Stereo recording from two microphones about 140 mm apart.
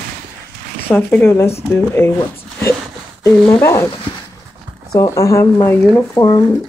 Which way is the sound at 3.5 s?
15° left (ahead or behind).